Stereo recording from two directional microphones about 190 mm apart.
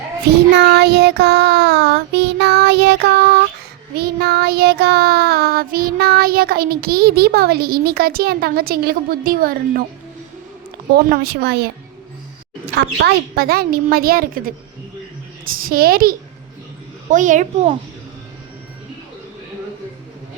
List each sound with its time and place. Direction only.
0.5 s child singing: 60° right (ahead or behind)
10.9 s a woman's voice: 55° right (ahead or behind)
12.7 s child singing: 55° right (ahead or behind)
17.1 s a child's voice: 40° right (ahead or behind)